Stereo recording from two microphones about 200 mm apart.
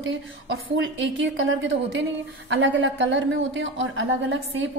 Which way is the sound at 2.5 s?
65° right (ahead or behind).